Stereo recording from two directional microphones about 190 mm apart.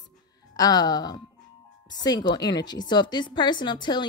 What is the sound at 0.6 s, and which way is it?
Speech, 20° left (ahead or behind).